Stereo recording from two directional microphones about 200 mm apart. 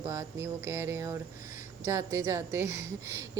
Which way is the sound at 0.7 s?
10° right (ahead or behind).